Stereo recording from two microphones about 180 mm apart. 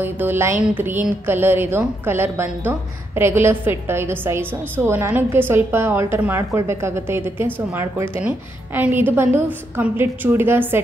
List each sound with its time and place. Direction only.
0.0 s a woman's voice: 10° right (ahead or behind)